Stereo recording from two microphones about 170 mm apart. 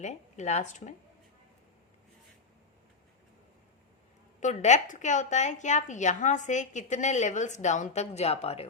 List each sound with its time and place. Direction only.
0.0 s a woman's voice: 45° left (ahead or behind)
4.4 s a woman's voice: 45° left (ahead or behind)